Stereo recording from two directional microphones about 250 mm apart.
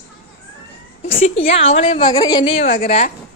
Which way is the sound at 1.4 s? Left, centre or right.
Left.